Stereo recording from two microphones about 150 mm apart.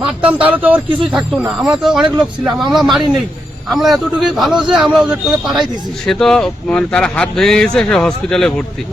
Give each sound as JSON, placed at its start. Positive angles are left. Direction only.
{"t": 0.3, "sound": "speech", "side_deg": -10}